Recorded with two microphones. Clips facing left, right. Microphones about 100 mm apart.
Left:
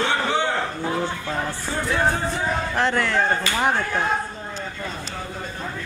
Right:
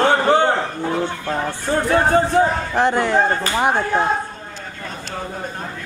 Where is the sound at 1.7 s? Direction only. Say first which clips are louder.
Right 7 dB; 55° right (ahead or behind).